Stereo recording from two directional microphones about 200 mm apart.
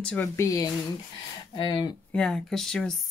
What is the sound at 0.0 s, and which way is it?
Speech, 10° left (ahead or behind).